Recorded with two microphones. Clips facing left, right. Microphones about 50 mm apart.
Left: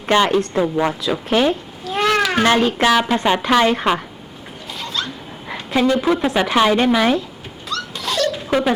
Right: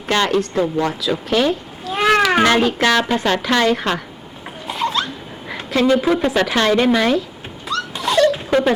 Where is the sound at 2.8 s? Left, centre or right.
Centre.